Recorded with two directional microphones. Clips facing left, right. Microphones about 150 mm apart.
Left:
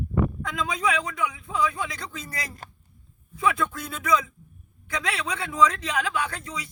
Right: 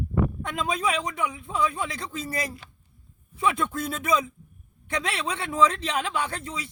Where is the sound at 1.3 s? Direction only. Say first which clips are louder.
Even; 30° right (ahead or behind).